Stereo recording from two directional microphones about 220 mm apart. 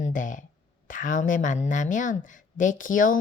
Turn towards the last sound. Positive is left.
turn(degrees=40)  # may be behind; listen again after turning